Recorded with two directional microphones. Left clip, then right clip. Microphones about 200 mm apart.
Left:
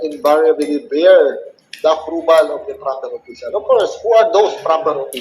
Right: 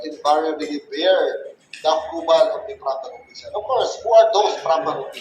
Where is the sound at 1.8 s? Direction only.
30° left (ahead or behind).